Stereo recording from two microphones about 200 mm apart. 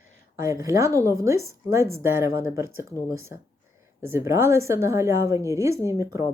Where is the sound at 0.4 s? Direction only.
15° right (ahead or behind).